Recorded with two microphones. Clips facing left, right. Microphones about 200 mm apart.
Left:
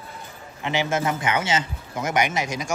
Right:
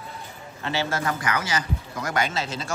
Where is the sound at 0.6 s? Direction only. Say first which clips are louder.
Left 3 dB; 15° left (ahead or behind).